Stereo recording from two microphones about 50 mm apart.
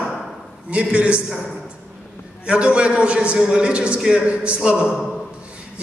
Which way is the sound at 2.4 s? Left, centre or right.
Right.